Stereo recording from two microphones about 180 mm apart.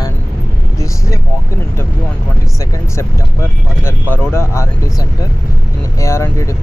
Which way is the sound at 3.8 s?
10° left (ahead or behind).